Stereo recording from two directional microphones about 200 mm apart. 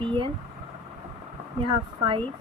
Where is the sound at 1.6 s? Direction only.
25° right (ahead or behind).